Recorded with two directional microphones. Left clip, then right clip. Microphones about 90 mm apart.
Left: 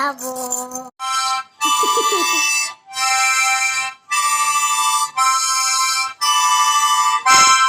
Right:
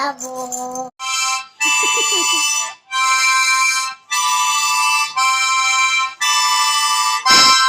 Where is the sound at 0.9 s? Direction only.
10° right (ahead or behind).